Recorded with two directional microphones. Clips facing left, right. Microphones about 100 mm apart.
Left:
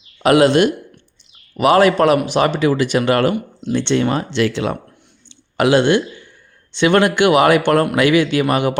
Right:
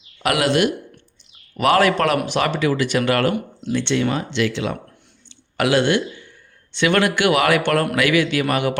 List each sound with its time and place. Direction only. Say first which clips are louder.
0.2 s speech: left 6 dB; 25° left (ahead or behind)
1.5 s speech: left 4 dB; 20° left (ahead or behind); by 4.8 s 45° left (ahead or behind)
5.3 s clicking: left 4 dB; 25° left (ahead or behind)
6.7 s speech: left 4 dB; 25° left (ahead or behind)